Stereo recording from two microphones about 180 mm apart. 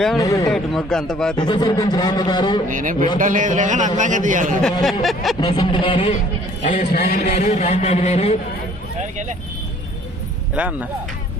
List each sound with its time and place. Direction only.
0.2 s speech: 20° left (ahead or behind)
0.5 s a man's voice: 5° left (ahead or behind)
1.4 s speech: 25° left (ahead or behind)
2.6 s a man's voice: 50° right (ahead or behind)
4.8 s a man's voice: centre (ahead or behind)
5.4 s speech: 25° left (ahead or behind)
6.6 s a man's voice: 40° left (ahead or behind)
6.9 s speech: 60° left (ahead or behind)
7.3 s speech: 40° left (ahead or behind)
10.5 s speech: 10° right (ahead or behind)